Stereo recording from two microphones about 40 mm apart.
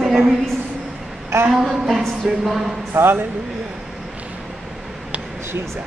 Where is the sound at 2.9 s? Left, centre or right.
Right.